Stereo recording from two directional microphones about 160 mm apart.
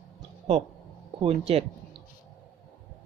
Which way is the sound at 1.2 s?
35° right (ahead or behind).